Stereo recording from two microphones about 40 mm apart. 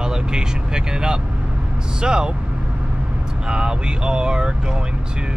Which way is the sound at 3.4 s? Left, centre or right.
Right.